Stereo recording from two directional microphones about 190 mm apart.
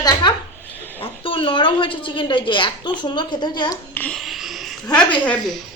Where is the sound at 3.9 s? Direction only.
5° left (ahead or behind).